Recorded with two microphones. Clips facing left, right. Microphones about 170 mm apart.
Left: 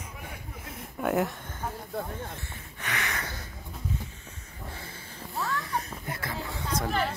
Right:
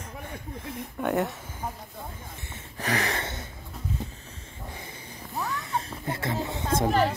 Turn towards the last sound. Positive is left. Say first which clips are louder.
# right 6 dB
turn(degrees=-40)  # may be behind; listen again after turning